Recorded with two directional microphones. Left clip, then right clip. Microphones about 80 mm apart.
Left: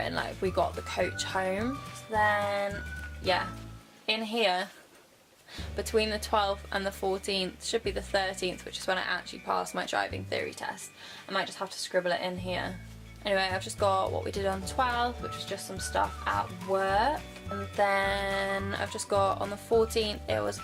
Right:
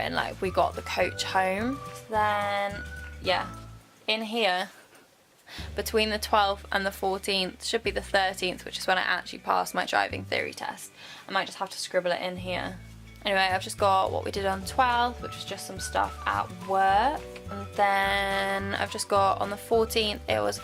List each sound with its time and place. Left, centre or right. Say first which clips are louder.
0.0 s a woman's voice: right 3 dB; right
2.5 s speech: right 2 dB; right
4.0 s speech: right 2 dB; right
5.7 s a woman's voice: right 2 dB; right